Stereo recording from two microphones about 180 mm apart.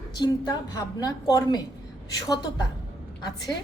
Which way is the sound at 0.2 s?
20° left (ahead or behind).